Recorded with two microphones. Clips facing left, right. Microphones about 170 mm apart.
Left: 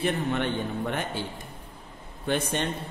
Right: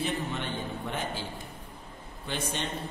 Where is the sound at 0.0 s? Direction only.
60° left (ahead or behind).